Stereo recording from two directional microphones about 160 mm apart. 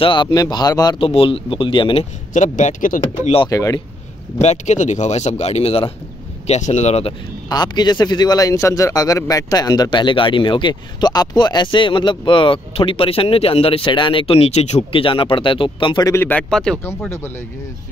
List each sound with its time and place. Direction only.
0.0 s a man's voice: 30° left (ahead or behind)
2.3 s speech: 50° left (ahead or behind)
3.4 s a man's voice: 20° left (ahead or behind)
4.4 s speech: 45° left (ahead or behind)
7.4 s a man's voice: 25° left (ahead or behind)
16.1 s speech: 15° left (ahead or behind)